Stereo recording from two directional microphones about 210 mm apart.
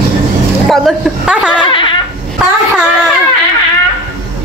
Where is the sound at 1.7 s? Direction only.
25° left (ahead or behind).